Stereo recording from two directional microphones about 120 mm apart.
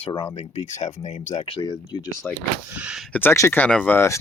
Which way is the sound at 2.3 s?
15° left (ahead or behind).